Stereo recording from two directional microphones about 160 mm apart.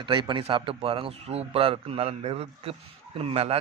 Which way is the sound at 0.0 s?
30° right (ahead or behind).